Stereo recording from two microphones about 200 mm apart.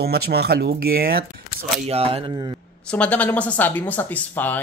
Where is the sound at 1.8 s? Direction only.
30° right (ahead or behind).